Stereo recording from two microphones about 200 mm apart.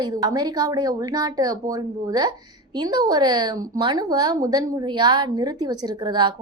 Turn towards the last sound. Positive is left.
turn(degrees=-20)  # may be behind; listen again after turning